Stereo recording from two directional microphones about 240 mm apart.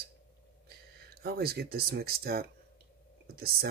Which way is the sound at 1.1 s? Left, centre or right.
Right.